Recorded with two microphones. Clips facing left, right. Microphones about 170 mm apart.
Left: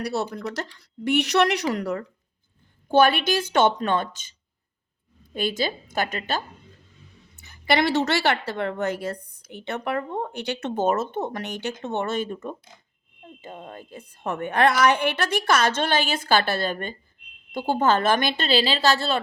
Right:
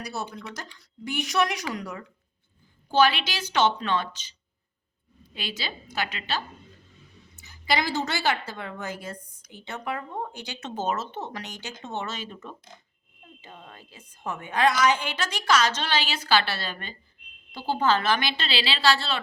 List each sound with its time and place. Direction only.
0.0 s a woman's voice: 65° left (ahead or behind)
2.9 s a woman's voice: 50° left (ahead or behind)
7.3 s a woman's voice: 60° left (ahead or behind)